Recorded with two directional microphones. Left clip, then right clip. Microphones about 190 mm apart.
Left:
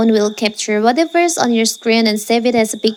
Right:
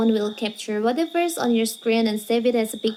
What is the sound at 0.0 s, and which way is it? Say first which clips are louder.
A child's voice: left 8 dB; 40° left (ahead or behind).